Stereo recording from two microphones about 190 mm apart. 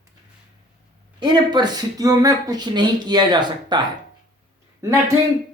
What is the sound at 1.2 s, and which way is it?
Speech, 25° right (ahead or behind).